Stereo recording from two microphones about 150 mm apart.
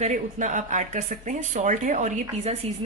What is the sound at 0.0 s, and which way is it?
Speech, 55° right (ahead or behind).